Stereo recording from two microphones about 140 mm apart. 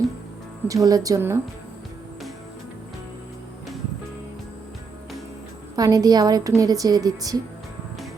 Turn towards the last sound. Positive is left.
turn(degrees=-25)  # may be behind; listen again after turning